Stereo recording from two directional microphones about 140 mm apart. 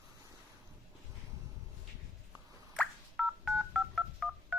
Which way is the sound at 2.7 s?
5° left (ahead or behind).